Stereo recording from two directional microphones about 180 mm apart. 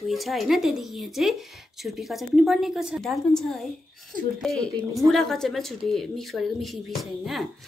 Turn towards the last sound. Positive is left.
turn(degrees=0)  # may be behind; listen again after turning